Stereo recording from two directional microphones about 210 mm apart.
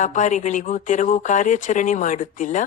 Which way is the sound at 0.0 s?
35° left (ahead or behind).